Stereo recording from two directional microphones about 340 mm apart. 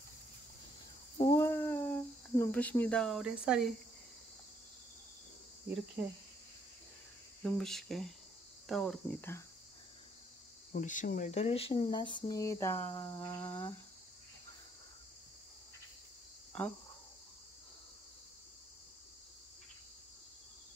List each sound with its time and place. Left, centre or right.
1.1 s cricket: centre
7.4 s speech: centre
10.7 s speech: left; by 13.7 s centre